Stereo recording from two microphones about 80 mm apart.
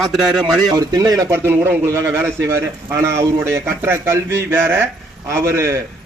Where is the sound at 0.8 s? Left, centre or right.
Right.